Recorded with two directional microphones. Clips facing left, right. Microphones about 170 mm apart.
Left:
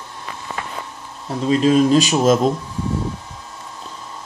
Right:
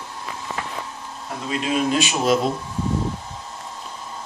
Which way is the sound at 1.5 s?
35° left (ahead or behind).